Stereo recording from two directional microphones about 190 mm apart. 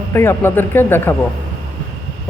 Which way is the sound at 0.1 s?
15° left (ahead or behind).